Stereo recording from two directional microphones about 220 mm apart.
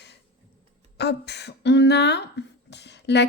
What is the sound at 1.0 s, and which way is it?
Speech, 50° left (ahead or behind).